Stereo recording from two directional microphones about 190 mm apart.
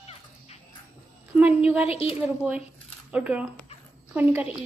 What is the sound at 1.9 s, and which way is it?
Speech, 30° left (ahead or behind).